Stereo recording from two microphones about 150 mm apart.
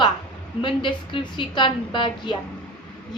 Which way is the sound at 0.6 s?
35° left (ahead or behind).